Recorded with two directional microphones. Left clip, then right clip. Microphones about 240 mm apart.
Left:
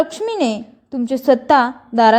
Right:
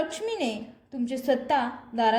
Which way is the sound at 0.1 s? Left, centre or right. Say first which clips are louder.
Left 10 dB; left.